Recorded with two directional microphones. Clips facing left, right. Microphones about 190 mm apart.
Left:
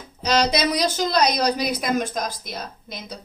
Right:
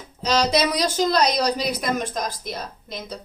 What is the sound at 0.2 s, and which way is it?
A woman's voice, centre (ahead or behind).